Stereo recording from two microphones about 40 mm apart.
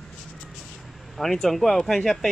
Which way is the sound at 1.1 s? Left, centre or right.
Centre.